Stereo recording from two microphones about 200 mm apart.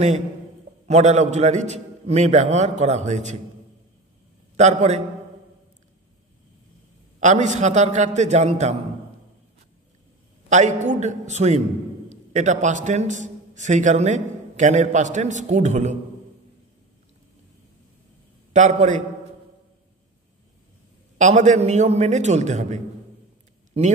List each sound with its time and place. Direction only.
0.8 s a man's voice: 35° right (ahead or behind)
4.6 s a man's voice: 35° right (ahead or behind)
7.2 s a man's voice: 35° right (ahead or behind)
10.5 s a man's voice: 35° right (ahead or behind)
18.5 s a man's voice: 35° right (ahead or behind)
21.2 s a man's voice: 35° right (ahead or behind)